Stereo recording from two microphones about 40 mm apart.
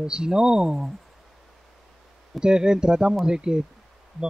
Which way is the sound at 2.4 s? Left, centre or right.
Centre.